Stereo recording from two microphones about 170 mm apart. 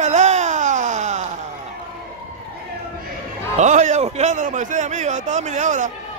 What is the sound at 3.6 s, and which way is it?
A man's voice, 45° right (ahead or behind).